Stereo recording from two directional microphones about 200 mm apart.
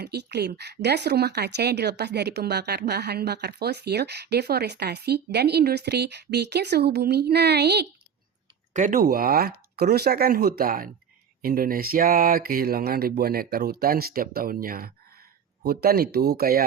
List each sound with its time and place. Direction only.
0.0 s speech: 55° right (ahead or behind)
8.7 s speech: 40° right (ahead or behind)